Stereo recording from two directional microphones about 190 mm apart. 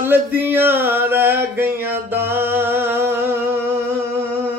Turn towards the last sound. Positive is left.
turn(degrees=-10)  # may be behind; listen again after turning